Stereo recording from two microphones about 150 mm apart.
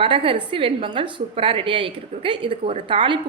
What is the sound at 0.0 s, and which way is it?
A woman's voice, 35° right (ahead or behind).